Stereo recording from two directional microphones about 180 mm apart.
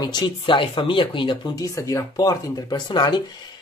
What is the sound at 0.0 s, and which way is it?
Speech, 25° left (ahead or behind).